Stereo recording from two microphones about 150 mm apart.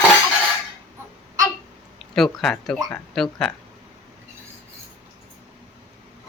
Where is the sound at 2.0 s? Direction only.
Centre (ahead or behind).